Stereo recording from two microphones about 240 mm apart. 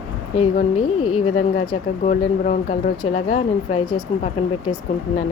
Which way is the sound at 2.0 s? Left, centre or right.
Left.